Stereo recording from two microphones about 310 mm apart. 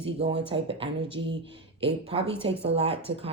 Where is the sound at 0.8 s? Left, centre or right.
Centre.